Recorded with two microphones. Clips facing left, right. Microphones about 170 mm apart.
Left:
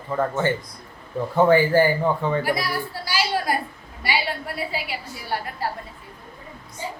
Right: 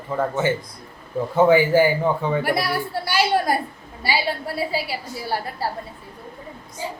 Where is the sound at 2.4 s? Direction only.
65° right (ahead or behind).